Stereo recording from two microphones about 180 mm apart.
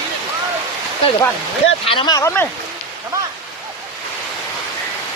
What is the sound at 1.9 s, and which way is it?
Speech, 25° left (ahead or behind).